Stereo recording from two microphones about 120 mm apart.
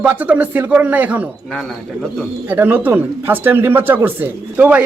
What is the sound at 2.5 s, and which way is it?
Speech, 15° right (ahead or behind).